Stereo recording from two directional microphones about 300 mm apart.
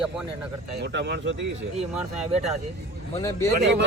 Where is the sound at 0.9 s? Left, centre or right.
Right.